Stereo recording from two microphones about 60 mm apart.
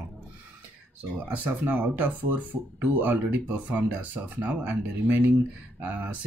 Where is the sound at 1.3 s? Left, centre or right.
Right.